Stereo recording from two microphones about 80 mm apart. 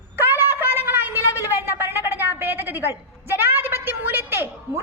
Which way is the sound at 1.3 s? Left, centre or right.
Right.